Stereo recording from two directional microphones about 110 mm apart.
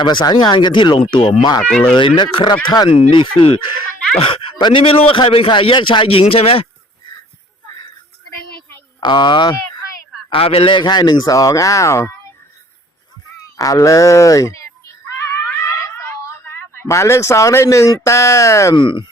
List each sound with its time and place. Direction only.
0.0 s a man's voice: 45° left (ahead or behind); by 6.7 s 60° left (ahead or behind)
9.0 s speech: 45° left (ahead or behind)
10.2 s a man's voice: 55° left (ahead or behind); by 12.1 s 25° left (ahead or behind)
13.6 s speech: 30° left (ahead or behind)
15.2 s screaming: 25° left (ahead or behind)
16.5 s speech: 25° left (ahead or behind)
18.8 s a man's voice: 50° left (ahead or behind)